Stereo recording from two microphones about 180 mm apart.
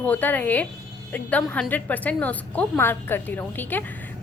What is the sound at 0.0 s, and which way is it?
A woman's voice, 10° left (ahead or behind).